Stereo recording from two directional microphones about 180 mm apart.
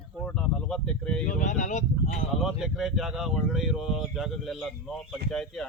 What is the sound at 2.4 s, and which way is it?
Speech, centre (ahead or behind).